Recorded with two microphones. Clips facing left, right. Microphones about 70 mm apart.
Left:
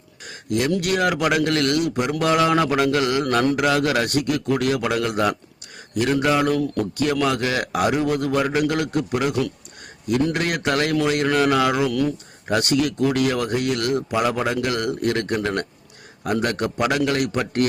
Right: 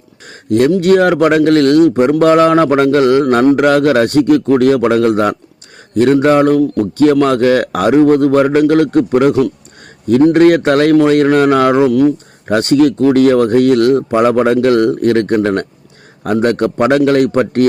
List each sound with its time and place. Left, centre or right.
0.3 s a man's voice: right